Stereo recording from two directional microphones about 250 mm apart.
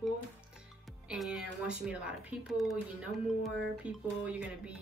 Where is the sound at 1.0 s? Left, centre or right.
Centre.